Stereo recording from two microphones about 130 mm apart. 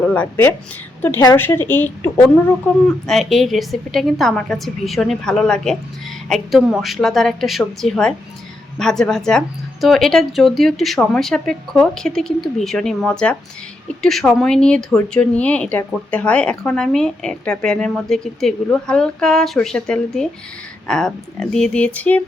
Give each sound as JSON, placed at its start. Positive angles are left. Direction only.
{"t": 0.0, "sound": "speech", "side_deg": 10}
{"t": 3.1, "sound": "speech", "side_deg": 0}